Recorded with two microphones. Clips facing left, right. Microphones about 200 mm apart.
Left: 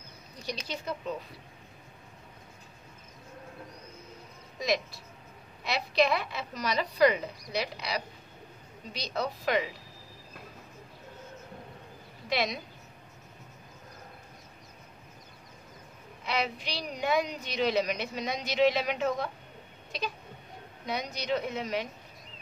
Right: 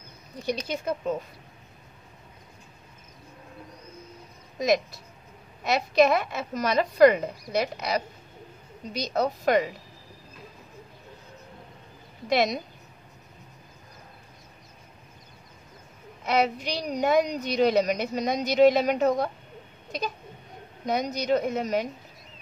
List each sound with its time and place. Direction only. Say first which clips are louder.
0.7 s a woman's voice: right 7 dB; 45° right (ahead or behind)
4.6 s a woman's voice: right 6 dB; 45° right (ahead or behind)
12.3 s a woman's voice: right 7 dB; 45° right (ahead or behind)
16.3 s a woman's voice: right 8 dB; 45° right (ahead or behind)
20.8 s a woman's voice: right 7 dB; 45° right (ahead or behind)